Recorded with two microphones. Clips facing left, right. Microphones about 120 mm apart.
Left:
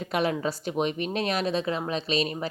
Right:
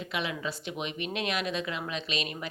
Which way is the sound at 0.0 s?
45° left (ahead or behind).